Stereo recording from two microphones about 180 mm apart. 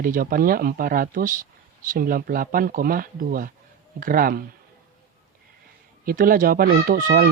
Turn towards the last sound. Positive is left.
turn(degrees=-50)  # may be behind; listen again after turning